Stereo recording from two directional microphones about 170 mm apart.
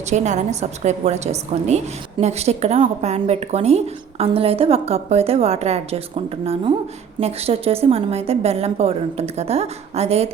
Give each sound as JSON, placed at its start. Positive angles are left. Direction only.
{"t": 0.1, "sound": "a woman's voice", "side_deg": -45}